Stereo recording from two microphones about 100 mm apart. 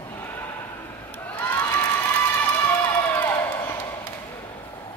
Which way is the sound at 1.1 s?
20° left (ahead or behind).